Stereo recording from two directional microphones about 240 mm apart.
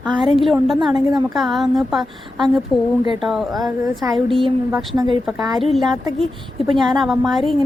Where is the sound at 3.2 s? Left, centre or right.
Centre.